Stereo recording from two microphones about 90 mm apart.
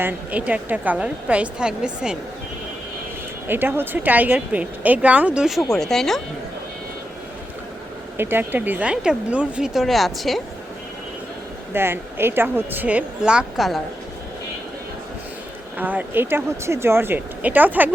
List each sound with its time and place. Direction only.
0.0 s speech: 20° right (ahead or behind)
3.4 s speech: 25° right (ahead or behind); by 6.2 s 5° left (ahead or behind)
8.2 s speech: 25° right (ahead or behind); by 10.4 s centre (ahead or behind)
11.7 s speech: 25° right (ahead or behind); by 13.7 s 10° right (ahead or behind)
15.8 s speech: 20° right (ahead or behind)